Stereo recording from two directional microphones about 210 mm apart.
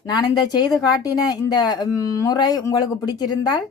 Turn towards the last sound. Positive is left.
turn(degrees=20)  # may be behind; listen again after turning